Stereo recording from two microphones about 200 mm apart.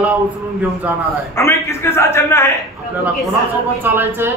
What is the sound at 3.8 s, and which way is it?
Speech, 10° right (ahead or behind).